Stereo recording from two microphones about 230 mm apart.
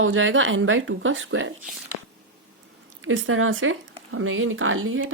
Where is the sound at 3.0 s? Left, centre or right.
Right.